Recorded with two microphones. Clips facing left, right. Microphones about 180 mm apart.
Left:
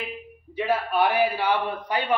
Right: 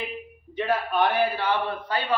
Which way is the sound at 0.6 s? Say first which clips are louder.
Left 1 dB; 10° left (ahead or behind).